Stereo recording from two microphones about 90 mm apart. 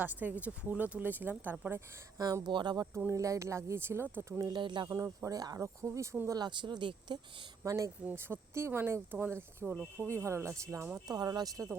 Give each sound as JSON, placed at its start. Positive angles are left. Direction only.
{"t": 0.0, "sound": "speech", "side_deg": -20}
{"t": 2.1, "sound": "speech", "side_deg": -45}
{"t": 3.1, "sound": "speech", "side_deg": -35}
{"t": 4.4, "sound": "speech", "side_deg": -55}
{"t": 4.9, "sound": "speech", "side_deg": -35}
{"t": 5.6, "sound": "speech", "side_deg": -35}
{"t": 6.2, "sound": "speech", "side_deg": -50}
{"t": 7.6, "sound": "speech", "side_deg": -35}
{"t": 8.0, "sound": "speech", "side_deg": -25}
{"t": 11.1, "sound": "speech", "side_deg": -45}